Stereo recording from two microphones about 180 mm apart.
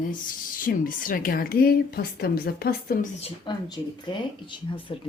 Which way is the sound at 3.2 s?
25° left (ahead or behind).